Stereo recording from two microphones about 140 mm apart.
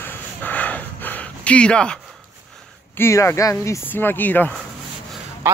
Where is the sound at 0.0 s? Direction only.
15° left (ahead or behind).